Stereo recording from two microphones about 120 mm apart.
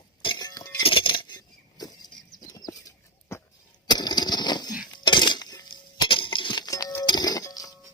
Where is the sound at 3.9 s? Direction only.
35° left (ahead or behind).